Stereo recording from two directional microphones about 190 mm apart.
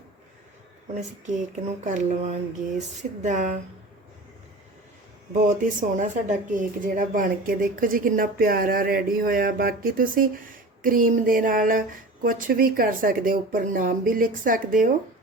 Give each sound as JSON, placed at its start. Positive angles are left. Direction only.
{"t": 0.9, "sound": "speech", "side_deg": -40}
{"t": 5.5, "sound": "speech", "side_deg": -40}